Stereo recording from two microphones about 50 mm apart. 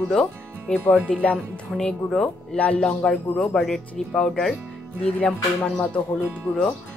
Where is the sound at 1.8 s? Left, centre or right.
Centre.